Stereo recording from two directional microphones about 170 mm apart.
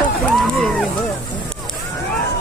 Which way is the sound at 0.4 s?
Centre (ahead or behind).